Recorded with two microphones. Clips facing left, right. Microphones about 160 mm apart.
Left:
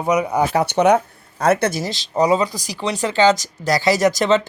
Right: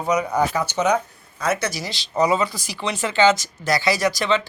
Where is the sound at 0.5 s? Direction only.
65° left (ahead or behind).